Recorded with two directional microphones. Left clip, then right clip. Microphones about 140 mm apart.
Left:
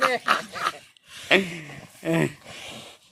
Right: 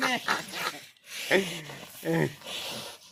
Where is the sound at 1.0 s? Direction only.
Centre (ahead or behind).